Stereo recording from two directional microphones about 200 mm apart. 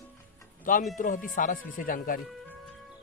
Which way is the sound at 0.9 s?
40° left (ahead or behind).